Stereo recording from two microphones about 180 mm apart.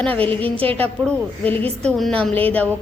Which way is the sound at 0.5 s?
30° right (ahead or behind).